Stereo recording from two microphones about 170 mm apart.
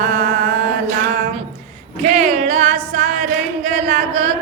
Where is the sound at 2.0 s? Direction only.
45° right (ahead or behind).